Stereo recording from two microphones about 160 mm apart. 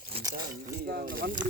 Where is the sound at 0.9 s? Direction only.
65° right (ahead or behind).